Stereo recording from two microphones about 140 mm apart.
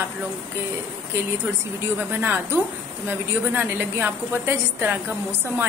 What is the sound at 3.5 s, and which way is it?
A woman's voice, 15° right (ahead or behind).